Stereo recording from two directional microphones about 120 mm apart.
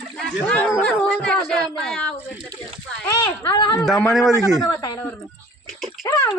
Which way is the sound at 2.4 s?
45° right (ahead or behind).